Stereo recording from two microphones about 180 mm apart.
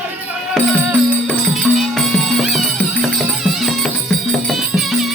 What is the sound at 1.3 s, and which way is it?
Music, centre (ahead or behind).